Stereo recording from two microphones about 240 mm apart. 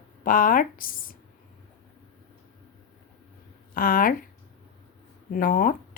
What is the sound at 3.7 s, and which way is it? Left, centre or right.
Speech, left.